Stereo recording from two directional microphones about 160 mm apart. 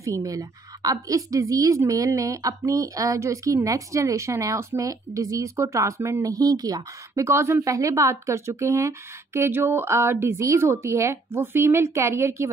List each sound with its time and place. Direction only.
0.0 s a woman's voice: 20° right (ahead or behind)